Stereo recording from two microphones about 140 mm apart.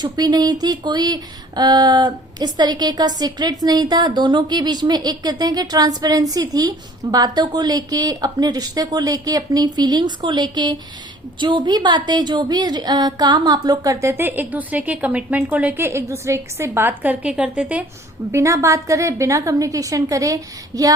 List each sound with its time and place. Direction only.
0.0 s a woman's voice: 30° right (ahead or behind); by 17.8 s 10° right (ahead or behind)
18.3 s speech: 20° right (ahead or behind)